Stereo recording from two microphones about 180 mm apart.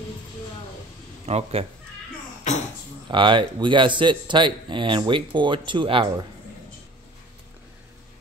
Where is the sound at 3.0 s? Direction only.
25° right (ahead or behind).